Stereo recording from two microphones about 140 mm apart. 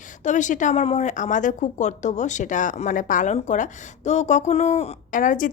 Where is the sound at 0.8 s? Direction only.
50° left (ahead or behind).